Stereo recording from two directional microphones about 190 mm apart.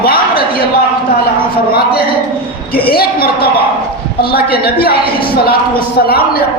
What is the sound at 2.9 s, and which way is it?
A man's voice, 55° left (ahead or behind).